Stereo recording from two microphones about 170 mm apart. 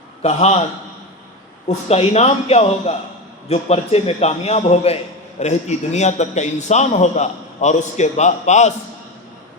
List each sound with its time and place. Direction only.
0.2 s a man's voice: 40° left (ahead or behind)
1.6 s a man's voice: 40° left (ahead or behind)